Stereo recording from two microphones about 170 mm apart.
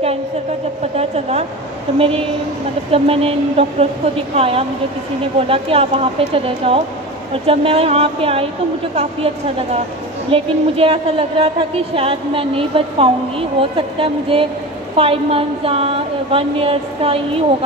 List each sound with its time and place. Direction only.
0.9 s a woman's voice: 35° right (ahead or behind)